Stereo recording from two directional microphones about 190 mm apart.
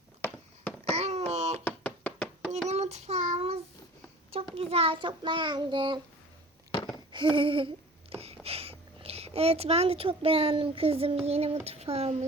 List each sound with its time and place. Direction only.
0.2 s a sound: 10° left (ahead or behind)
0.9 s wail: 35° right (ahead or behind)
1.6 s chopping: 10° left (ahead or behind)
2.6 s child singing: 35° right (ahead or behind)
7.1 s a sound: 25° right (ahead or behind)
8.1 s speech: 30° right (ahead or behind)